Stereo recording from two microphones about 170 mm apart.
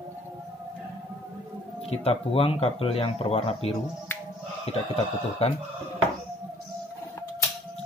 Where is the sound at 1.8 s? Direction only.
35° left (ahead or behind).